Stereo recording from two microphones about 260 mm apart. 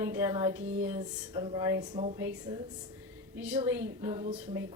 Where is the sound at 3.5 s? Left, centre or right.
Centre.